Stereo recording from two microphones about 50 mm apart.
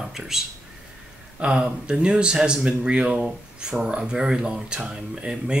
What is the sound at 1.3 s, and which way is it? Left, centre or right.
Speech, centre.